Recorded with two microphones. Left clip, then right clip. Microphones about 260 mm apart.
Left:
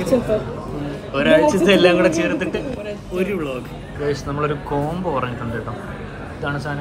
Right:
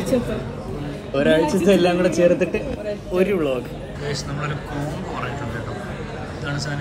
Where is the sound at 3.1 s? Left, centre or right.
Centre.